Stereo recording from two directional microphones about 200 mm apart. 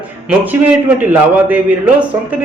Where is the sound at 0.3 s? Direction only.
10° right (ahead or behind).